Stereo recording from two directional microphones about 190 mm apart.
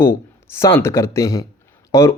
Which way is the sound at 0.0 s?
15° left (ahead or behind).